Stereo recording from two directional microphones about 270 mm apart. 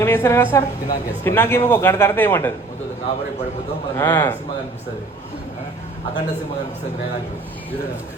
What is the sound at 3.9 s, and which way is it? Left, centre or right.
Speech, centre.